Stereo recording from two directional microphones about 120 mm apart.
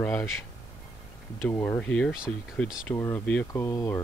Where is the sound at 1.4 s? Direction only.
15° left (ahead or behind).